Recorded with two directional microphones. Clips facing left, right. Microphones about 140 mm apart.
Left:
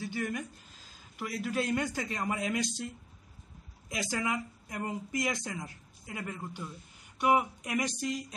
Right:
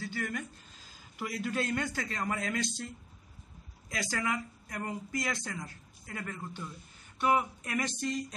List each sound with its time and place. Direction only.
0.0 s speech: 15° left (ahead or behind)
0.8 s speech: centre (ahead or behind); by 2.9 s 15° left (ahead or behind)
3.9 s speech: 20° left (ahead or behind)